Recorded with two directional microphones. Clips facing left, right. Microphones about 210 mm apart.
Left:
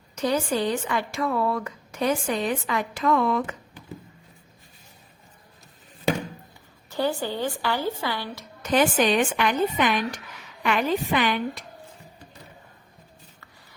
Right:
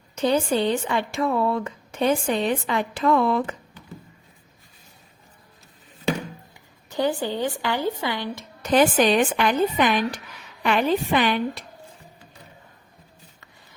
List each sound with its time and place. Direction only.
0.2 s speech: 25° right (ahead or behind)
6.9 s speech: 20° right (ahead or behind)
8.6 s a woman's voice: 35° right (ahead or behind)